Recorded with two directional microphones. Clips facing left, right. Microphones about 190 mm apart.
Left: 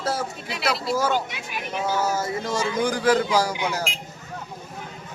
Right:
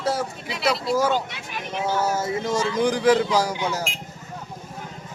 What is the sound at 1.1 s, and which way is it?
Speech, 10° left (ahead or behind).